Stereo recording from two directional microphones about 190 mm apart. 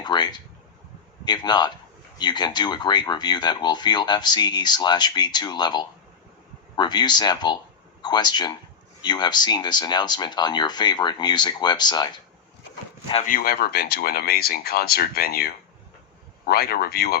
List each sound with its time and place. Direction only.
0.0 s speech: 20° left (ahead or behind)
13.2 s speech: 50° left (ahead or behind)